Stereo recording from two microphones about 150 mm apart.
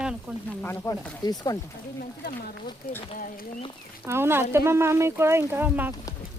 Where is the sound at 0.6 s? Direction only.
15° left (ahead or behind).